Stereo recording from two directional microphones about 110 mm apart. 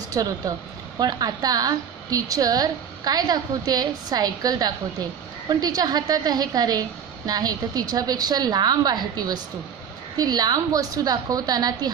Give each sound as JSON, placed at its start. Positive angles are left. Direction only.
{"t": 0.1, "sound": "a woman's voice", "side_deg": -35}